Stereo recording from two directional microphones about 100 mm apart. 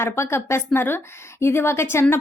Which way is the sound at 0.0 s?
25° left (ahead or behind).